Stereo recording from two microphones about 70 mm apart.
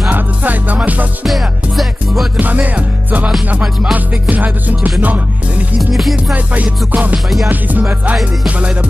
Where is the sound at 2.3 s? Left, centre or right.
Right.